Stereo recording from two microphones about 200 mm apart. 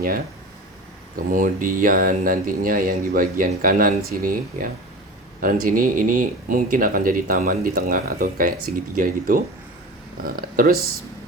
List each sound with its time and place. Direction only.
1.3 s speech: 40° right (ahead or behind)